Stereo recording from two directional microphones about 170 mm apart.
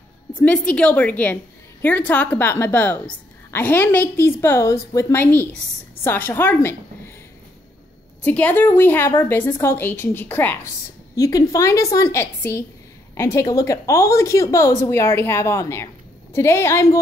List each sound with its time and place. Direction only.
0.4 s a woman's voice: 5° left (ahead or behind)
8.2 s a woman's voice: 10° left (ahead or behind)